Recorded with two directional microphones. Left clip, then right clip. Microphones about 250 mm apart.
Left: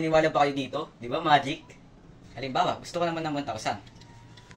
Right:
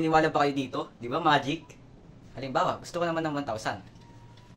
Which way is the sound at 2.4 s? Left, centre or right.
Centre.